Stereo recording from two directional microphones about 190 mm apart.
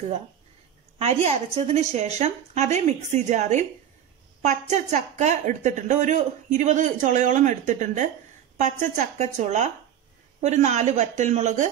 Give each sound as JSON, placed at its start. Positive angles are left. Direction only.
{"t": 0.9, "sound": "a woman's voice", "side_deg": -35}